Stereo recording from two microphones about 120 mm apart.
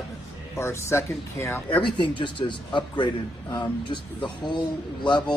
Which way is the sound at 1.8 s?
40° left (ahead or behind).